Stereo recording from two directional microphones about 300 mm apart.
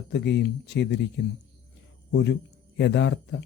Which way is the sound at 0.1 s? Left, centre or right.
Left.